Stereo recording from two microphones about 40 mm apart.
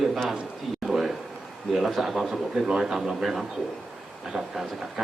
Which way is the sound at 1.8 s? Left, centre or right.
Centre.